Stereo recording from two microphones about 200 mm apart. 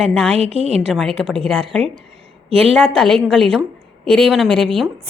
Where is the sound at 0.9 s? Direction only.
Centre (ahead or behind).